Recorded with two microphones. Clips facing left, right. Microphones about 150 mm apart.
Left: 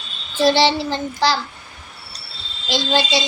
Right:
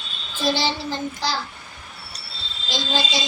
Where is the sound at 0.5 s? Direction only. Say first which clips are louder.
Left 7 dB; 80° left.